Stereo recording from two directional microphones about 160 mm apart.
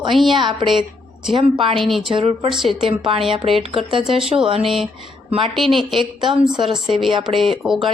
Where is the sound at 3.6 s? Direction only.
35° right (ahead or behind).